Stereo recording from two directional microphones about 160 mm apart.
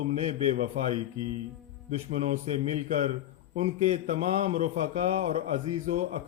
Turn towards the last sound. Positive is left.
turn(degrees=-45)  # may be behind; listen again after turning